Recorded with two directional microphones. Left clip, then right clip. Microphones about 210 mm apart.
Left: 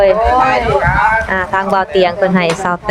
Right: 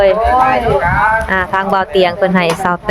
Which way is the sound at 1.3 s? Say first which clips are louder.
Even; 5° right (ahead or behind).